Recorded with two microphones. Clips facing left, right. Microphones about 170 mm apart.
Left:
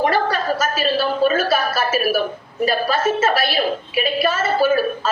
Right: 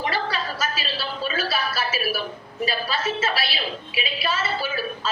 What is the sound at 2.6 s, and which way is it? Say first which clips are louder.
A woman's voice: left 8 dB; 50° left (ahead or behind).